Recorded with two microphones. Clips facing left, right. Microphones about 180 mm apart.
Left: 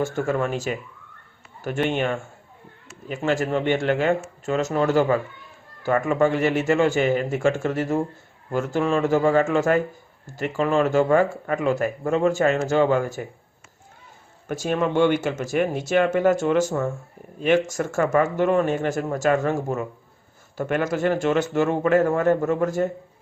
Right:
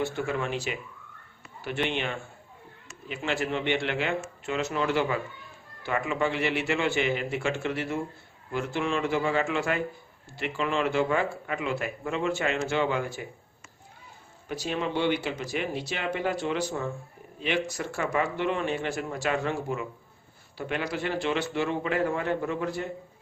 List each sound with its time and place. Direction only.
0.0 s speech: 45° left (ahead or behind)
14.4 s speech: 50° left (ahead or behind)